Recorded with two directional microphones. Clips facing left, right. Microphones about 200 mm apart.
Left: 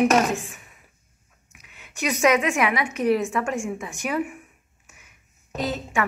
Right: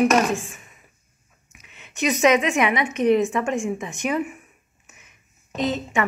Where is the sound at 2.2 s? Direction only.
5° left (ahead or behind).